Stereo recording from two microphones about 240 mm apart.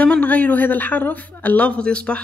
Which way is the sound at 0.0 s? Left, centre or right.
Centre.